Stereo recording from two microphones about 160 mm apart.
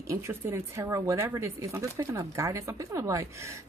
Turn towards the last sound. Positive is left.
turn(degrees=-20)  # may be behind; listen again after turning